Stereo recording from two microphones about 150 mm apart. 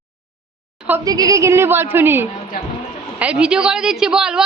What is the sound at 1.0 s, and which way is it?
A woman's voice, 25° right (ahead or behind).